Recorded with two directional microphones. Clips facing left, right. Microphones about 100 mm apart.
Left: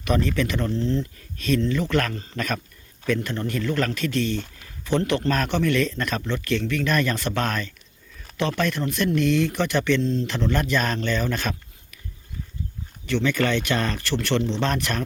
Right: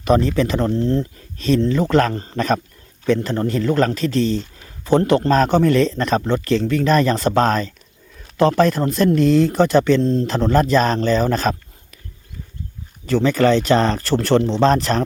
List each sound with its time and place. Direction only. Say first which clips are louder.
0.0 s speech: right 7 dB; 30° right (ahead or behind)
1.4 s speech: right 6 dB; 30° right (ahead or behind)
13.1 s speech: right 7 dB; 35° right (ahead or behind)